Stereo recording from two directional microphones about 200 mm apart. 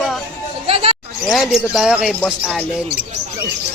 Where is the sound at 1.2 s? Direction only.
Centre (ahead or behind).